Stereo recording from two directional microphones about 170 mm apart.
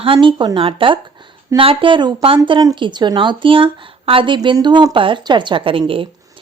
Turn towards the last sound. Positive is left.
turn(degrees=-30)  # may be behind; listen again after turning